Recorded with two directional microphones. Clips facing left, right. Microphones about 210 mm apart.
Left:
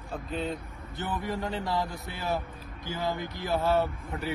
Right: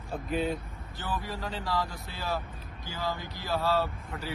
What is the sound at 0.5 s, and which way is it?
Speech, 20° left (ahead or behind).